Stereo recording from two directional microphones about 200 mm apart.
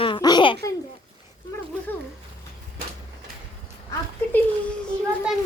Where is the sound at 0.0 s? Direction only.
20° left (ahead or behind).